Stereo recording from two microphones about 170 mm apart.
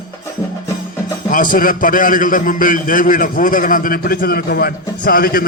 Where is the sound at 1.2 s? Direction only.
55° left (ahead or behind).